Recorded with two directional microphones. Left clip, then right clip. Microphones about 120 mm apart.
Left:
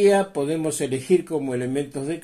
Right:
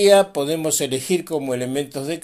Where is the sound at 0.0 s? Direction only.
20° right (ahead or behind).